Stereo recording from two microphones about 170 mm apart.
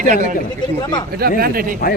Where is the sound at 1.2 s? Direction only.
60° right (ahead or behind).